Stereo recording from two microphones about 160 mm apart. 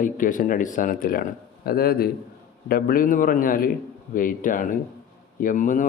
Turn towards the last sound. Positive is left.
turn(degrees=55)  # may be behind; listen again after turning